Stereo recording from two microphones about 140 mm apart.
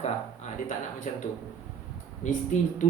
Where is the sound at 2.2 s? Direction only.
60° left (ahead or behind).